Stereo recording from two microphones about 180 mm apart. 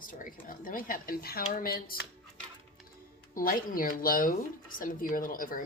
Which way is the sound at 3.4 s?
50° left (ahead or behind).